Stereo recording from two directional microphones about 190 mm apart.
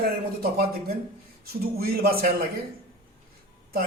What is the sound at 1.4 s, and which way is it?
Speech, 50° right (ahead or behind).